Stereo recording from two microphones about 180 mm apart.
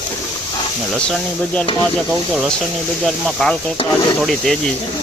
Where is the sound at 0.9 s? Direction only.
5° left (ahead or behind).